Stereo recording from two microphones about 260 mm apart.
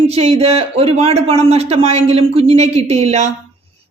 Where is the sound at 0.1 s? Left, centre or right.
Right.